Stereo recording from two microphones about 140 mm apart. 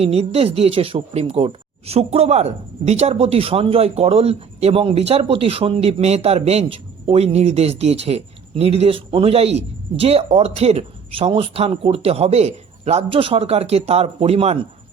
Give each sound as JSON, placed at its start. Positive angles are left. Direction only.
{"t": 0.0, "sound": "speech", "side_deg": -45}